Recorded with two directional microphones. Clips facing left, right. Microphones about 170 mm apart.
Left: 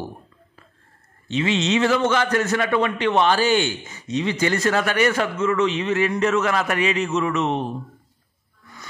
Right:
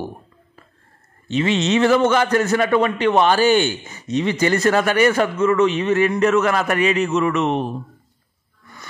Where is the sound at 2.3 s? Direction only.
35° right (ahead or behind); by 7.5 s 60° right (ahead or behind).